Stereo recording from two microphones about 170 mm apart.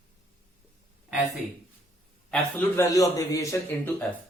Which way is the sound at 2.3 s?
10° left (ahead or behind).